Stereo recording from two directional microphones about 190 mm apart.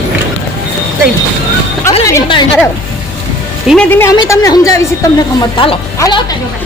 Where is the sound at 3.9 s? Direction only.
15° left (ahead or behind).